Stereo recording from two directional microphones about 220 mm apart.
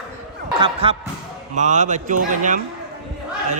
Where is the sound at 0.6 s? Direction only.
25° right (ahead or behind).